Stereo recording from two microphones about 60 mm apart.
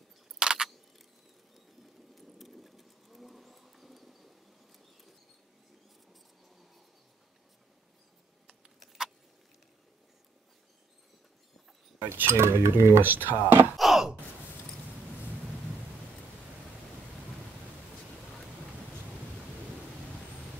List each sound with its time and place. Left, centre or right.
0.4 s a sound: centre
2.1 s vehicle: centre
8.7 s keys jangling: centre
12.3 s cutlery: right
13.0 s speech: right
13.7 s a sound: centre